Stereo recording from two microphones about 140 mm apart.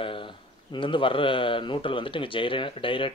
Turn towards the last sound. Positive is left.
turn(degrees=40)  # may be behind; listen again after turning